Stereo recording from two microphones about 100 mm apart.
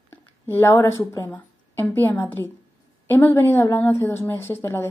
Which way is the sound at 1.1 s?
25° left (ahead or behind).